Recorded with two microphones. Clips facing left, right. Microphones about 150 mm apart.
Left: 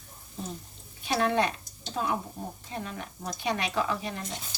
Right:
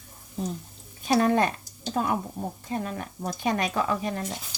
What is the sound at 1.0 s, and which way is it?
Speech, 45° right (ahead or behind).